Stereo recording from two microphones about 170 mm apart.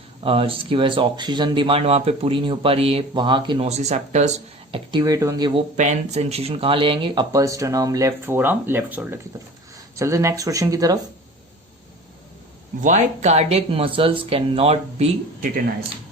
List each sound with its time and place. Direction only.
0.2 s speech: 35° right (ahead or behind)
3.7 s speech: 40° right (ahead or behind)
4.7 s speech: 25° right (ahead or behind)
5.7 s speech: 45° right (ahead or behind); by 10.9 s 20° right (ahead or behind)
12.8 s speech: 45° right (ahead or behind)